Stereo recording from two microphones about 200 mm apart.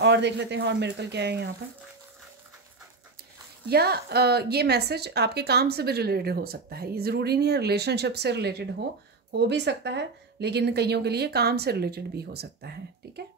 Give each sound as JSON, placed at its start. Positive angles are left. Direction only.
{"t": 0.0, "sound": "speech", "side_deg": -60}
{"t": 3.6, "sound": "a woman's voice", "side_deg": -55}